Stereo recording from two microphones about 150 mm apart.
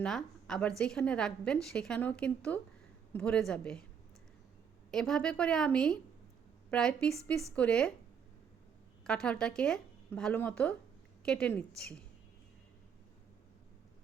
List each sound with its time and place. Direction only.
0.0 s a woman's voice: 5° left (ahead or behind)
4.9 s speech: 5° left (ahead or behind)
9.0 s speech: 5° left (ahead or behind)